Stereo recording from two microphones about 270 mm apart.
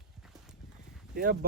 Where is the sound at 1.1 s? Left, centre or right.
Right.